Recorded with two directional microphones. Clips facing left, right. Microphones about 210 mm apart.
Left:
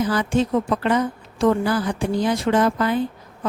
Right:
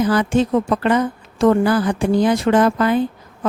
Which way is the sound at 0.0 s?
80° right.